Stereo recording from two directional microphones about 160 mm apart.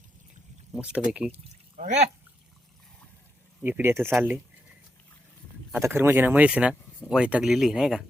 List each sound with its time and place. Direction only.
0.7 s speech: 5° right (ahead or behind)
1.7 s speech: 45° right (ahead or behind)
3.6 s speech: 15° right (ahead or behind)
5.7 s speech: 15° right (ahead or behind)